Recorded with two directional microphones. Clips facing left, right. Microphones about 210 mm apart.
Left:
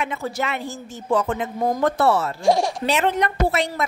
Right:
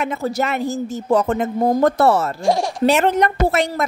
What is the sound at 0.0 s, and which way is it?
Speech, 40° right (ahead or behind).